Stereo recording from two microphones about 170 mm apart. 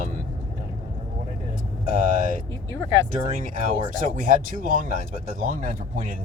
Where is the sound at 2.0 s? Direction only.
55° right (ahead or behind).